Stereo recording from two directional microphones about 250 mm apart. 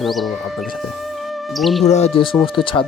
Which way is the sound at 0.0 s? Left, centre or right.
Centre.